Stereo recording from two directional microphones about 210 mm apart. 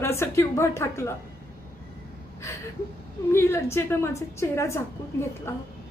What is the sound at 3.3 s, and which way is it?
A woman's voice, 10° left (ahead or behind).